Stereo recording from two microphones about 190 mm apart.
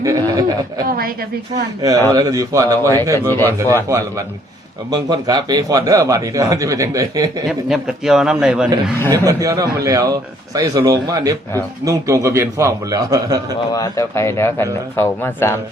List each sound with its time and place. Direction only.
0.0 s a sound: 15° right (ahead or behind)
0.9 s a woman's voice: 50° right (ahead or behind)
1.8 s speech: 20° right (ahead or behind)
3.2 s speech: 10° left (ahead or behind)
4.9 s speech: 20° right (ahead or behind)
7.4 s a man's voice: centre (ahead or behind)
9.1 s a man's voice: 15° right (ahead or behind)
13.7 s speech: 15° left (ahead or behind)